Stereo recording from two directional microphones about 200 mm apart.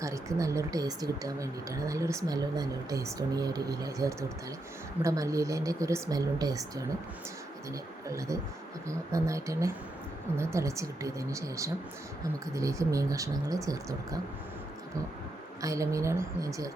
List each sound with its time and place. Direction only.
0.0 s speech: 15° right (ahead or behind)
15.6 s speech: 15° right (ahead or behind)